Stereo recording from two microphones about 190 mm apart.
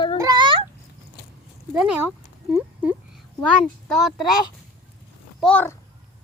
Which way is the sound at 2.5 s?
10° right (ahead or behind).